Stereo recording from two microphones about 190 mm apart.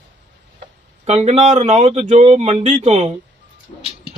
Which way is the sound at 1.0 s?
35° right (ahead or behind).